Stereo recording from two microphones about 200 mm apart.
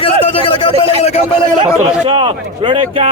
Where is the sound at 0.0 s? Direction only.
25° left (ahead or behind).